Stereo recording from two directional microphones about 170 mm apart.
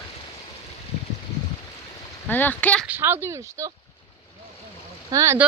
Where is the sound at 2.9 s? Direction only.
10° right (ahead or behind).